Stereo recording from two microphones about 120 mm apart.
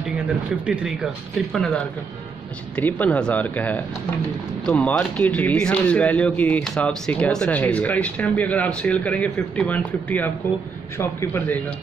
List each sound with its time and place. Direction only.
0.7 s speech: 5° right (ahead or behind)
2.7 s a man's voice: 15° left (ahead or behind)